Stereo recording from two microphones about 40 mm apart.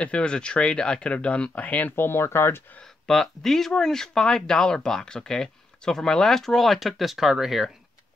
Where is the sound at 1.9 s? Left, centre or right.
Left.